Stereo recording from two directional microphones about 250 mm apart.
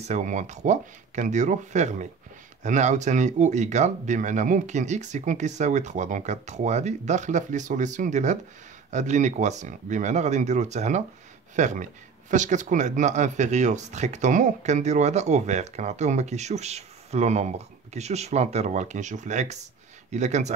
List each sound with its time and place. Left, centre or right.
0.0 s speech: right